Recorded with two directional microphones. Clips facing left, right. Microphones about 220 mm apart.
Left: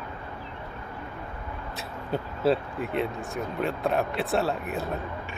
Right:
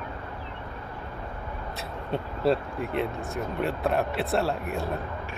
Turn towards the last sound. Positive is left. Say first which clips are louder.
# even
turn(degrees=0)  # may be behind; listen again after turning